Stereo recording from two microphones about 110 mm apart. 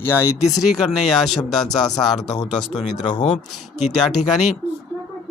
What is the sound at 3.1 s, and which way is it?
Speech, 55° left (ahead or behind).